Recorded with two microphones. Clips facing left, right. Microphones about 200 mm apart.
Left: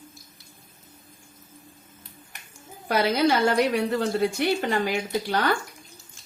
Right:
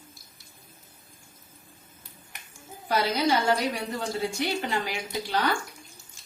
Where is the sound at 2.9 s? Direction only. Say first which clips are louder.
Left 3 dB; 60° left (ahead or behind).